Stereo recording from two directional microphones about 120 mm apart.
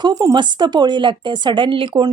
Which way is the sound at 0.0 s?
30° right (ahead or behind).